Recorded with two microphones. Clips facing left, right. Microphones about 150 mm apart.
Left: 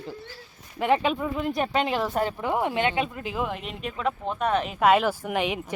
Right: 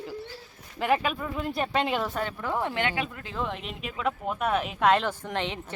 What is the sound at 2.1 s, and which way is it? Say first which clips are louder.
Speech: left 5 dB; 35° left (ahead or behind).